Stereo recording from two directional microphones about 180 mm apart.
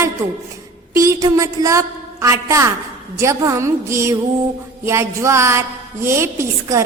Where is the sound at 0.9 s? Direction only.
15° right (ahead or behind).